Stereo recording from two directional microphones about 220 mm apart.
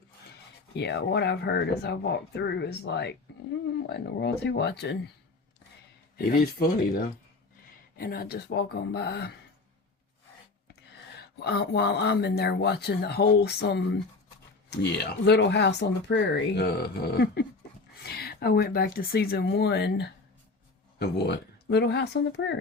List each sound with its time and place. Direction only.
0.7 s speech: 50° left (ahead or behind)
6.1 s speech: 45° left (ahead or behind)
7.9 s speech: 40° left (ahead or behind)
11.2 s speech: 50° left (ahead or behind)